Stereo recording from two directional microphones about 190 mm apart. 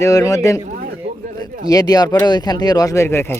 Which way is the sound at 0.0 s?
20° left (ahead or behind).